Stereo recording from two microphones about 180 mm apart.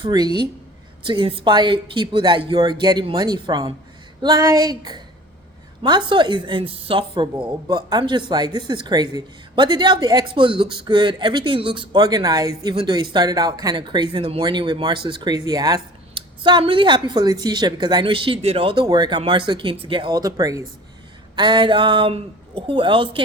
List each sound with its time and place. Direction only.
0.0 s a woman's voice: 25° right (ahead or behind)
6.1 s a woman's voice: 25° right (ahead or behind)